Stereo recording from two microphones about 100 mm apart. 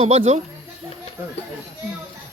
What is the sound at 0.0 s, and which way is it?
Speech, 90° right.